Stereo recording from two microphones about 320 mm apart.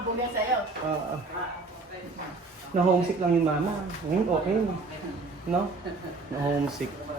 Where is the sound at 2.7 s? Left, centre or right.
Right.